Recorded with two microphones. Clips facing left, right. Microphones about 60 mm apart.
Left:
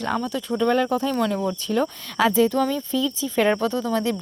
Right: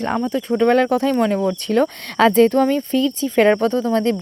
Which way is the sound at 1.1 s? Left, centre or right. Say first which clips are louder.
Right 5 dB; right.